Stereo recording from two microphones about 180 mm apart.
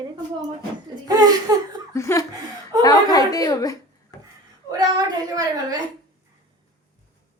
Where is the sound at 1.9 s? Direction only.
15° left (ahead or behind).